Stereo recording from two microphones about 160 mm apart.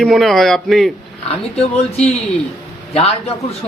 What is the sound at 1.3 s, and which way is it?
A woman's voice, 40° left (ahead or behind).